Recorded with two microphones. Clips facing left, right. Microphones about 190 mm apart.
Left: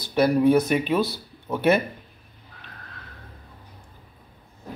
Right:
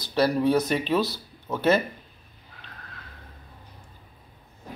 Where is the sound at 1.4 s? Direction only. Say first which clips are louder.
Left 2 dB; 15° left (ahead or behind).